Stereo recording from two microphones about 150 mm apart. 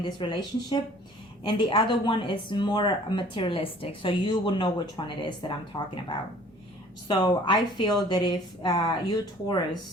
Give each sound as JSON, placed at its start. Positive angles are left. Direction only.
{"t": 0.0, "sound": "speech", "side_deg": 30}
{"t": 7.1, "sound": "speech", "side_deg": 30}